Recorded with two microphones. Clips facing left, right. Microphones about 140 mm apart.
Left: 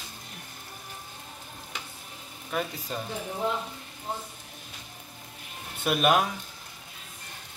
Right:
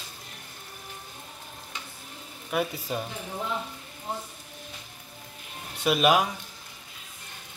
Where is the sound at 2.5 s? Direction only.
10° right (ahead or behind).